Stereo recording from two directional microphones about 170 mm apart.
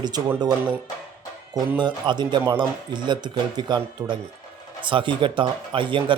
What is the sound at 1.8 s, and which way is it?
Speech, 25° right (ahead or behind).